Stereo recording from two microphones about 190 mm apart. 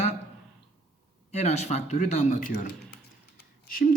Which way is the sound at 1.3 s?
35° left (ahead or behind).